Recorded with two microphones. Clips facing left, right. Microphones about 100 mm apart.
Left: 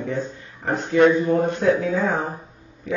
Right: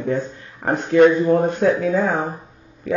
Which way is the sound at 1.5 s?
55° right (ahead or behind).